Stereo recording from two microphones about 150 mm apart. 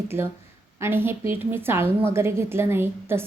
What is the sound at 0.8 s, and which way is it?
A woman's voice, 15° right (ahead or behind).